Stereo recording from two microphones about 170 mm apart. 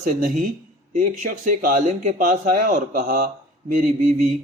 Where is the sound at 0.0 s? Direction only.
55° right (ahead or behind).